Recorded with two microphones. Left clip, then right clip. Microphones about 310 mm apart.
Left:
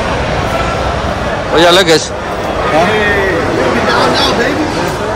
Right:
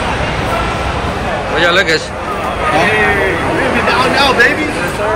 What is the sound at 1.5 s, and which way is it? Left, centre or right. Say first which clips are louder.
Speech: left 4 dB; centre.